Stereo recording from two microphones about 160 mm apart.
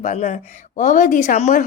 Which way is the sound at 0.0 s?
45° left (ahead or behind).